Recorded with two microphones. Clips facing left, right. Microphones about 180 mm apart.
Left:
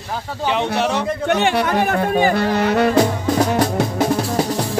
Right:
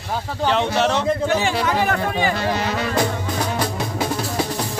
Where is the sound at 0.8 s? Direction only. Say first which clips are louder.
Even; 10° left (ahead or behind).